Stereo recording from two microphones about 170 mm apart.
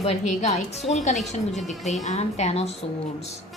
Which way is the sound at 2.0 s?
40° left (ahead or behind).